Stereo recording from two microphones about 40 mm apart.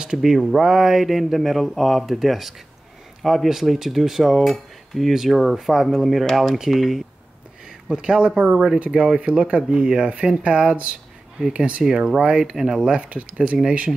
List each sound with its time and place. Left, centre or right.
0.2 s speech: centre
5.1 s speech: centre
7.9 s speech: right
8.7 s speech: right
11.8 s speech: centre
13.0 s speech: right
13.5 s speech: right